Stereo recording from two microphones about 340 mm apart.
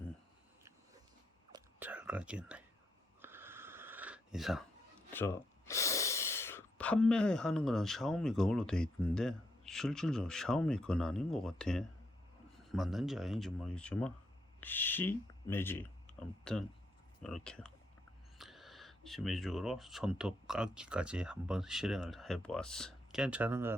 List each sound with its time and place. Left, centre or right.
1.5 s whispering: centre
3.2 s a sound: centre
5.1 s speech: centre